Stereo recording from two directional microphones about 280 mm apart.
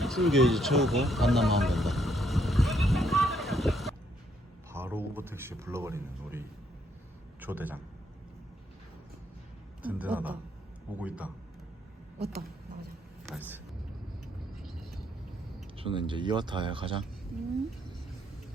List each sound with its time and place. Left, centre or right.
0.0 s a sound: centre
4.7 s speech: centre
7.4 s speech: centre
9.8 s a man's voice: centre
12.2 s speech: right
13.2 s speech: centre
14.6 s vehicle: centre
15.8 s speech: centre